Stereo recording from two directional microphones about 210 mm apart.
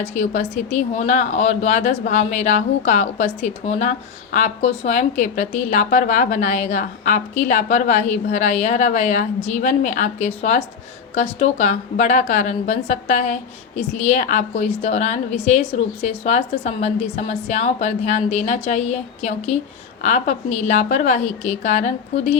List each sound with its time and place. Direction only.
0.0 s a woman's voice: 35° left (ahead or behind)